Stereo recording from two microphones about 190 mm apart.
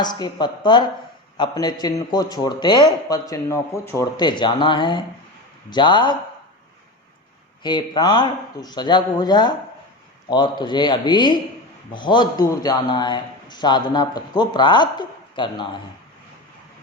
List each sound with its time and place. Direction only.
0.0 s a man's voice: 20° left (ahead or behind)
7.6 s a man's voice: 25° left (ahead or behind)